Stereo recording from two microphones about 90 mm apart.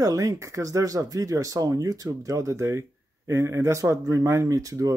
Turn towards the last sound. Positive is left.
turn(degrees=-40)  # may be behind; listen again after turning